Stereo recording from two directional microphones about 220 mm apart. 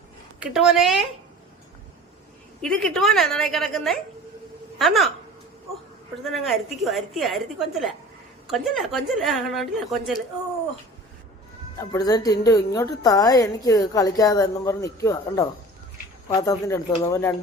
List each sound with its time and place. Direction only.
0.3 s a woman's voice: 5° right (ahead or behind)
2.6 s a woman's voice: 5° left (ahead or behind)
6.2 s a woman's voice: centre (ahead or behind)
11.8 s a woman's voice: 15° left (ahead or behind)